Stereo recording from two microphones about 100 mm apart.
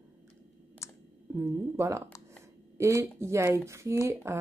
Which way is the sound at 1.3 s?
30° right (ahead or behind).